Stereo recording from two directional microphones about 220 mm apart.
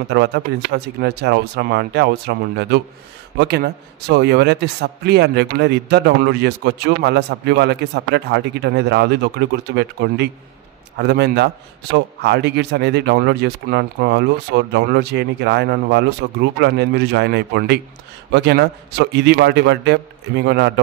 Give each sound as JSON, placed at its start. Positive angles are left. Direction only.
{"t": 0.1, "sound": "a man's voice", "side_deg": -50}